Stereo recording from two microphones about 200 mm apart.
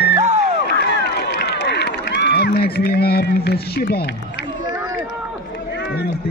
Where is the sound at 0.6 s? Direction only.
55° left (ahead or behind).